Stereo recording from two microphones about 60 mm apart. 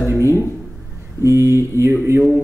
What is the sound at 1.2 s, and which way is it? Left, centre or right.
Speech, right.